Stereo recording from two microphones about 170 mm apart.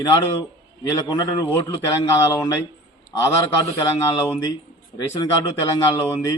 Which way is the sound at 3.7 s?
15° left (ahead or behind).